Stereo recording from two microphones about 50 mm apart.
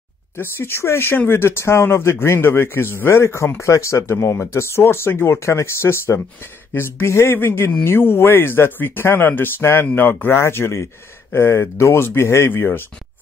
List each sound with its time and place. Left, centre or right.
0.4 s speech: left
4.1 s speech: left
9.6 s speech: left
9.9 s speech: left
10.4 s speech: left
11.7 s speech: left